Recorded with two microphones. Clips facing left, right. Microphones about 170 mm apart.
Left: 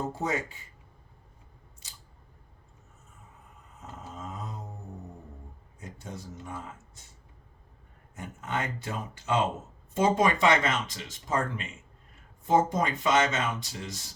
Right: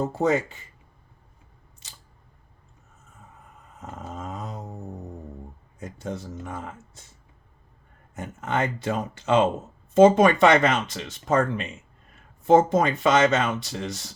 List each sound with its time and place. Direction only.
0.2 s speech: 70° right (ahead or behind)
3.8 s a sound: 70° right (ahead or behind)
6.0 s speech: 85° right
8.1 s speech: 80° right